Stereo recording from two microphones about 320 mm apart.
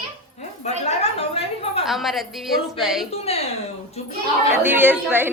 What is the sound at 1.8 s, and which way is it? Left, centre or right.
A woman's voice, centre.